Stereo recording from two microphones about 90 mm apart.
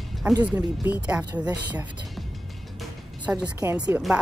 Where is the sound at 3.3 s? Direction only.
20° right (ahead or behind).